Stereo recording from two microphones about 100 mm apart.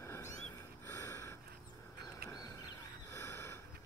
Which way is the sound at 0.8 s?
30° left (ahead or behind).